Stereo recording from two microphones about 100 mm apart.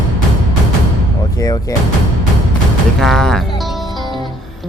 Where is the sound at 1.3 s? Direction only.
35° left (ahead or behind).